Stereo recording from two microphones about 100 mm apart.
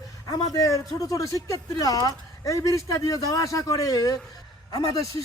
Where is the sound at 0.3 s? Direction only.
40° left (ahead or behind).